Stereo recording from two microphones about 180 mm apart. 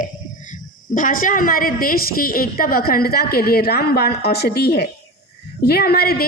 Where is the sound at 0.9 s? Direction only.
50° left (ahead or behind).